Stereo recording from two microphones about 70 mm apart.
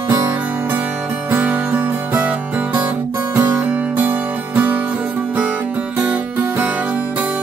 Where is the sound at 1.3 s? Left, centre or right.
Right.